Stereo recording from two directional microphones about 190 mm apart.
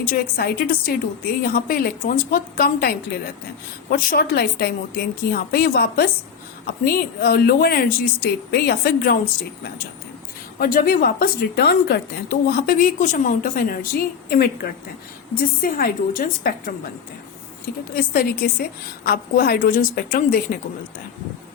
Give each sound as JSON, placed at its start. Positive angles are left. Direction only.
{"t": 0.0, "sound": "a woman's voice", "side_deg": 50}
{"t": 10.6, "sound": "a woman's voice", "side_deg": 50}
{"t": 17.9, "sound": "a woman's voice", "side_deg": 50}